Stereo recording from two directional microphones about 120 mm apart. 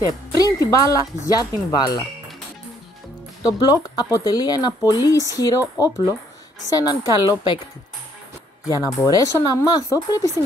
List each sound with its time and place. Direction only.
0.4 s speech: 30° left (ahead or behind)
3.4 s speech: 30° left (ahead or behind)
6.7 s speech: 30° left (ahead or behind)
8.6 s speech: 30° left (ahead or behind)